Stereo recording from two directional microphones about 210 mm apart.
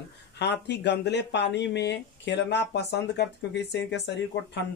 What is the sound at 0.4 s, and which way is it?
Speech, 55° left (ahead or behind).